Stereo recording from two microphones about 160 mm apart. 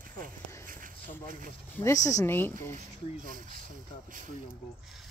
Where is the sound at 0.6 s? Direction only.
60° right (ahead or behind).